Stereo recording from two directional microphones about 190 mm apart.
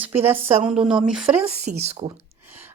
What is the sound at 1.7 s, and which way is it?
Speech, 35° right (ahead or behind).